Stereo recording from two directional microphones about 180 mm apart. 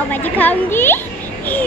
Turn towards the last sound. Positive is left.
turn(degrees=10)  # may be behind; listen again after turning